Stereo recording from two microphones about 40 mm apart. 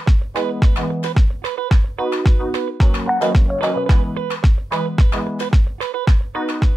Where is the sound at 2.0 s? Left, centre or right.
Left.